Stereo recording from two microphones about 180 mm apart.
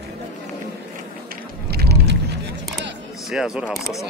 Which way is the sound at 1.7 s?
65° right (ahead or behind).